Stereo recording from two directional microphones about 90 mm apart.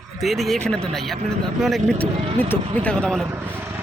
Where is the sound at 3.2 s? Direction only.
25° right (ahead or behind).